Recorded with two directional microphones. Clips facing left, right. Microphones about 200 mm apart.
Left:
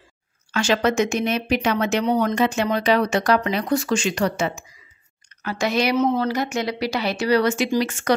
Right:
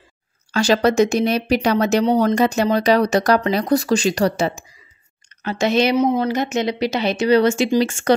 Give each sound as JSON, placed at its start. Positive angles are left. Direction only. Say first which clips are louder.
{"t": 0.5, "sound": "speech", "louder": "right 4 dB", "side_deg": -35}
{"t": 5.4, "sound": "a woman's voice", "louder": "right 4 dB", "side_deg": -25}